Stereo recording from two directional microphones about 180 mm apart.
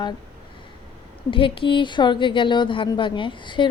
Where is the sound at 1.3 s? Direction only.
30° left (ahead or behind).